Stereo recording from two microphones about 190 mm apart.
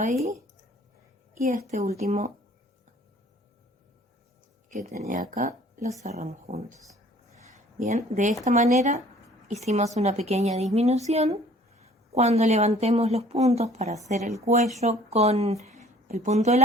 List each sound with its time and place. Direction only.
0.0 s a woman's voice: 35° right (ahead or behind)
1.7 s a woman's voice: 35° right (ahead or behind)
4.7 s a woman's voice: 45° right (ahead or behind)
8.1 s a woman's voice: 40° right (ahead or behind)